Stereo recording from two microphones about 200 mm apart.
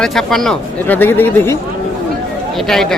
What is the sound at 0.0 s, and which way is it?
Speech, centre (ahead or behind).